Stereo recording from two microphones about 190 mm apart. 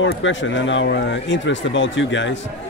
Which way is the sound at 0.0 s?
75° left (ahead or behind).